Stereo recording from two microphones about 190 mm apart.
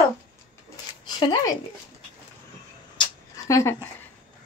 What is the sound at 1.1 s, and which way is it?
Speech, 25° left (ahead or behind).